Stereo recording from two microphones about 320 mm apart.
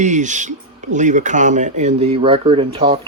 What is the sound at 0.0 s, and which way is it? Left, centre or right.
Speech, right.